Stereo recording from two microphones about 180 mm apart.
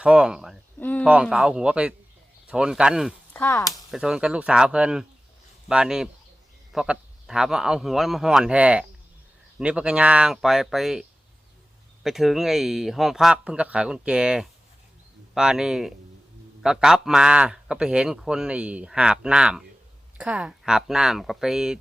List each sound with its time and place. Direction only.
0.0 s a man's voice: 5° right (ahead or behind)
0.8 s a sound: 10° left (ahead or behind)
1.0 s a man's voice: 5° right (ahead or behind)
3.3 s speech: 15° left (ahead or behind)
3.7 s a man's voice: 5° right (ahead or behind)
12.0 s a man's voice: centre (ahead or behind)